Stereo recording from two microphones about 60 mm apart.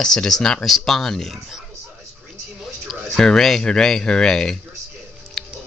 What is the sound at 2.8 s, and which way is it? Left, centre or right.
Speech, centre.